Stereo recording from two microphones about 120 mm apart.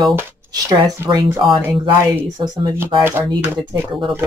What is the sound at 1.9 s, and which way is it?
Speech, 20° right (ahead or behind).